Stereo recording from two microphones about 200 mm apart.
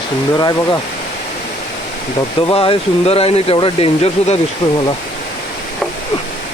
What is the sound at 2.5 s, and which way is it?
Speech, 30° left (ahead or behind).